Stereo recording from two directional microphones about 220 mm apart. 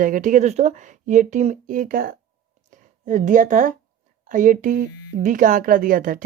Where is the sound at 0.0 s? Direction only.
35° right (ahead or behind).